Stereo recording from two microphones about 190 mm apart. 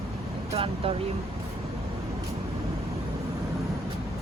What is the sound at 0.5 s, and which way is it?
Vehicle, 30° right (ahead or behind).